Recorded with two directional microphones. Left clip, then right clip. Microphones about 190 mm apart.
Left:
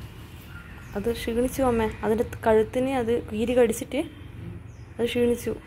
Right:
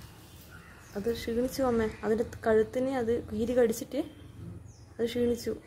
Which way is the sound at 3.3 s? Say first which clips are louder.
Left 5 dB; 15° right (ahead or behind).